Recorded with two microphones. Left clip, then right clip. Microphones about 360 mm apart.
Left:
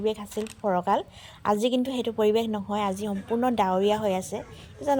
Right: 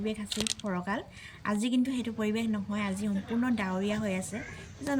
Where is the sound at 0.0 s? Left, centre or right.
Centre.